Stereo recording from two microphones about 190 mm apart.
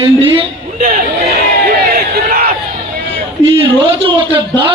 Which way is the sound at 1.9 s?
50° right (ahead or behind).